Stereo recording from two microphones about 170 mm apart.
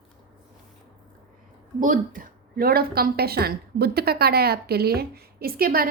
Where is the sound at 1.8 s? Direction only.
50° right (ahead or behind).